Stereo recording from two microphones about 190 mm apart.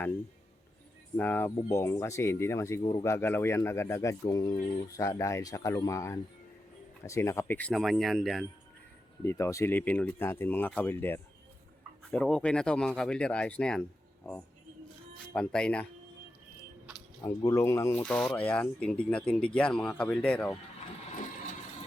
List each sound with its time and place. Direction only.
1.1 s speech: 10° left (ahead or behind)
9.2 s speech: 15° left (ahead or behind)
17.2 s speech: 15° left (ahead or behind)
18.0 s speech: 5° left (ahead or behind)